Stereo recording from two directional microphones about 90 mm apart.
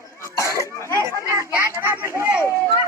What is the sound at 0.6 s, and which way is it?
Speech, 30° left (ahead or behind).